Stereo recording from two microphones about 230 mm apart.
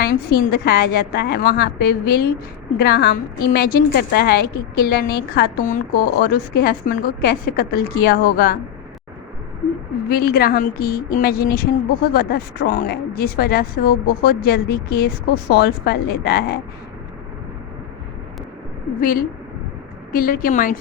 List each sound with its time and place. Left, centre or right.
0.0 s a woman's voice: left
10.1 s a woman's voice: left
18.9 s a woman's voice: left